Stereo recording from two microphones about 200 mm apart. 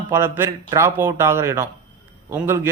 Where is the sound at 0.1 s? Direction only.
10° right (ahead or behind).